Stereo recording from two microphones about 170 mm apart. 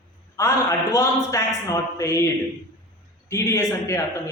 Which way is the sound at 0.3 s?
15° left (ahead or behind).